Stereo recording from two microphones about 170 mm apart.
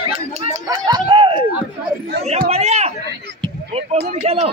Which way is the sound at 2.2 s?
40° right (ahead or behind).